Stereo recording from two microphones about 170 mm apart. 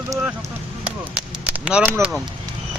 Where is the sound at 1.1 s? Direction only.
5° right (ahead or behind).